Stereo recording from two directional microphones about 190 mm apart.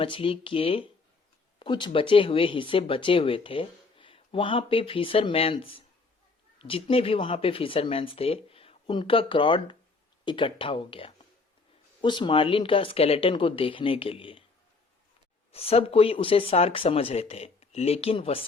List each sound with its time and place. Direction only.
0.0 s speech: 30° left (ahead or behind)
15.5 s speech: 30° left (ahead or behind)